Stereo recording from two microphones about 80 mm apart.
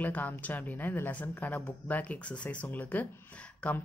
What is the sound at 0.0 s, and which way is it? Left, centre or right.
Speech, centre.